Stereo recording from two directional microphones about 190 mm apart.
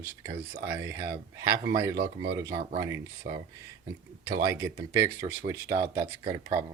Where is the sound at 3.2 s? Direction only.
50° right (ahead or behind).